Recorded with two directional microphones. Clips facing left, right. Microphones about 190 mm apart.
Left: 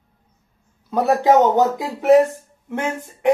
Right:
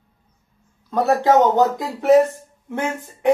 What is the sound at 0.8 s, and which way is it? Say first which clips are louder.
A man's voice: left 1 dB; 10° left (ahead or behind).